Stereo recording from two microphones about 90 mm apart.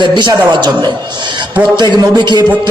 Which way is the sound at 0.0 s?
55° right (ahead or behind).